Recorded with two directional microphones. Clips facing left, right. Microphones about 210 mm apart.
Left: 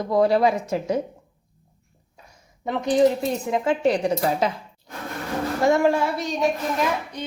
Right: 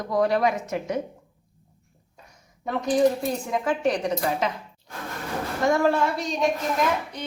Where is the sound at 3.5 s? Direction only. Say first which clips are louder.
Left 3 dB; 25° left (ahead or behind).